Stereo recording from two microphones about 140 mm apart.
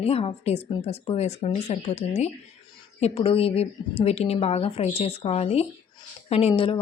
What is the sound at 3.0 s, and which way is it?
A woman's voice, 40° left (ahead or behind).